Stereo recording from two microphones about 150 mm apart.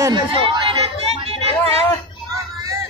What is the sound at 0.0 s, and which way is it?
Speech, 30° right (ahead or behind).